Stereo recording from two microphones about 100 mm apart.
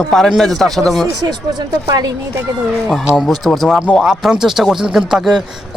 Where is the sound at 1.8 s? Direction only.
40° right (ahead or behind).